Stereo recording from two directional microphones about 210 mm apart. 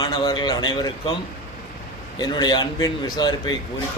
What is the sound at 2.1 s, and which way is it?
A man's voice, 20° left (ahead or behind).